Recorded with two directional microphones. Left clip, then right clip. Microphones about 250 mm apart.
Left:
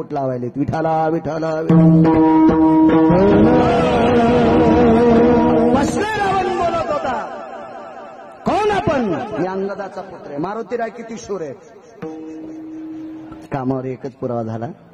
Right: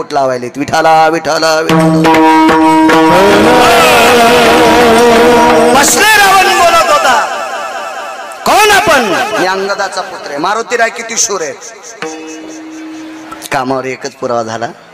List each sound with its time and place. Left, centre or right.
0.3 s a man's voice: centre
2.0 s music: centre
8.5 s a man's voice: centre
13.5 s a man's voice: centre